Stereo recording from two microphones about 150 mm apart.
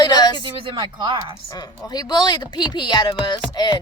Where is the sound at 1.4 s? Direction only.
25° left (ahead or behind).